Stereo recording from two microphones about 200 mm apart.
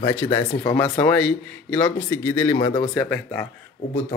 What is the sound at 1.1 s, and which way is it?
Speech, 5° left (ahead or behind).